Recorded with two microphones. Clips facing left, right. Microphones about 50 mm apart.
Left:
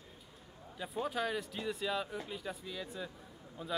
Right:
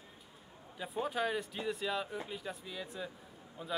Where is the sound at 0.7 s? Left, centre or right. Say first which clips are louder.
Right 1 dB; centre.